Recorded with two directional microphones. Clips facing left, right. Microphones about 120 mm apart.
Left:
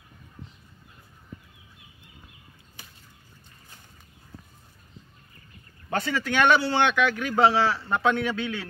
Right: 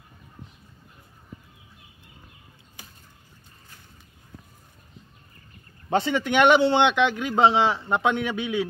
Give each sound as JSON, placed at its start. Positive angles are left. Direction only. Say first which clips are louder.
{"t": 5.9, "sound": "speech", "louder": "right 4 dB", "side_deg": -20}